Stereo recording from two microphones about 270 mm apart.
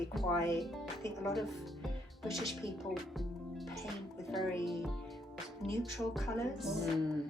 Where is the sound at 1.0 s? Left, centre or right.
Centre.